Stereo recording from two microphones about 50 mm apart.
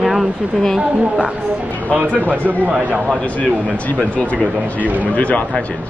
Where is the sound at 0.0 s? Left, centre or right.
Centre.